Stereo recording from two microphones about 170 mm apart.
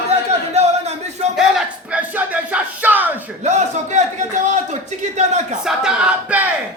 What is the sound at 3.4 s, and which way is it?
A man's voice, 45° right (ahead or behind).